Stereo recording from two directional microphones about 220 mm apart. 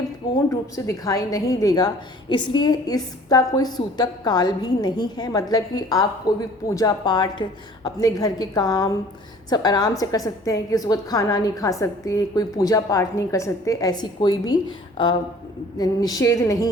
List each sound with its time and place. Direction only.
0.5 s a woman's voice: 15° left (ahead or behind)